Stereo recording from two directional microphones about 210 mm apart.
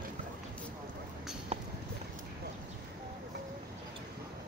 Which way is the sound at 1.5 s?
30° right (ahead or behind).